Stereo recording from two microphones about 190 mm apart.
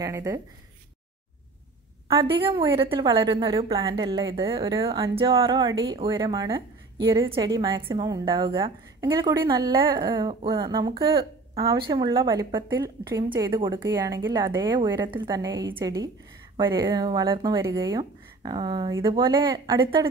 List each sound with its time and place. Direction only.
0.0 s speech: 15° right (ahead or behind)
2.0 s a woman's voice: 30° right (ahead or behind)